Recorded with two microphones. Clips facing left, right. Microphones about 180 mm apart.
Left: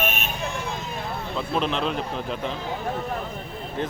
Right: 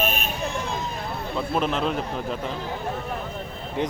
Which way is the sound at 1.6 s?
5° right (ahead or behind).